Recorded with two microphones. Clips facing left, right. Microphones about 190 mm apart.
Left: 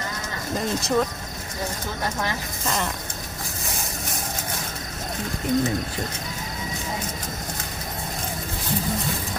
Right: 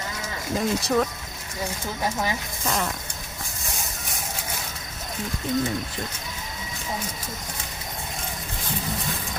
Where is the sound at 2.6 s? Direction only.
Centre (ahead or behind).